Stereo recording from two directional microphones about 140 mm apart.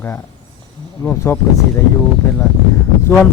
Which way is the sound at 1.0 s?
15° left (ahead or behind).